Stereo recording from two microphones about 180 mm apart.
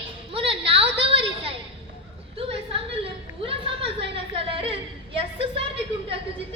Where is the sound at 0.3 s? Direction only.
30° right (ahead or behind).